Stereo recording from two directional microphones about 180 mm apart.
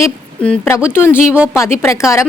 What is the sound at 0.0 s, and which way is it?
A woman's voice, 10° left (ahead or behind).